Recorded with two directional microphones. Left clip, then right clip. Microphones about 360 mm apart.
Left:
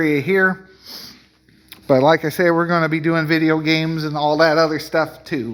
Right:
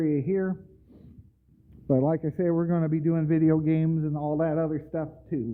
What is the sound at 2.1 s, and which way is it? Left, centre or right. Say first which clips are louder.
Speech: left 11 dB; centre.